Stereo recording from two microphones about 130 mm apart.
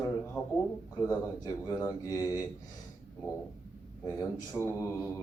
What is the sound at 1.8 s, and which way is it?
Speech, 25° left (ahead or behind).